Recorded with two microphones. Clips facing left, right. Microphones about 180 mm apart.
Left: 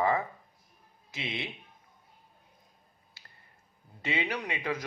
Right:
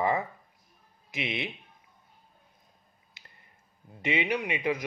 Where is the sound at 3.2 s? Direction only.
20° right (ahead or behind).